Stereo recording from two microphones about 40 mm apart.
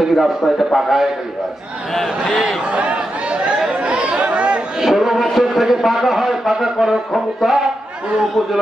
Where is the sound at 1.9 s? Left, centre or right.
Centre.